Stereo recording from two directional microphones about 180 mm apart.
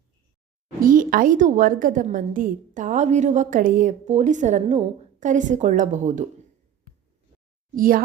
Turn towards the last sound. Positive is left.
turn(degrees=-50)  # may be behind; listen again after turning